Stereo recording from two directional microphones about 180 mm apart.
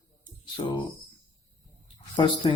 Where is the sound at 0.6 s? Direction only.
25° left (ahead or behind).